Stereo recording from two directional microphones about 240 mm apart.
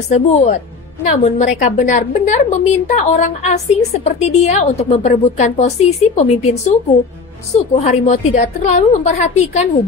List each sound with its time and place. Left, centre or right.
0.1 s a woman's voice: left
7.8 s a woman's voice: left